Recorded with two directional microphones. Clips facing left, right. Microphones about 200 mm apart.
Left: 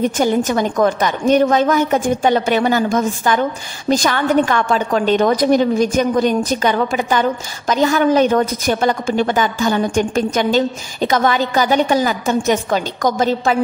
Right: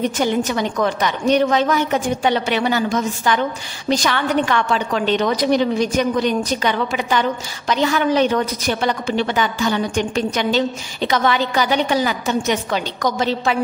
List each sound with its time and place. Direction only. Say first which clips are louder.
0.0 s a woman's voice: left 3 dB; 45° left (ahead or behind)